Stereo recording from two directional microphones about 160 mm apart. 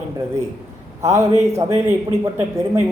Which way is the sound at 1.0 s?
20° right (ahead or behind).